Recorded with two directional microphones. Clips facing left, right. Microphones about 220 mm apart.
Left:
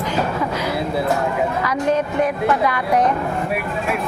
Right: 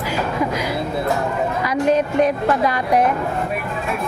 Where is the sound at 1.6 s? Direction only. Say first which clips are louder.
Right 2 dB; 10° right (ahead or behind).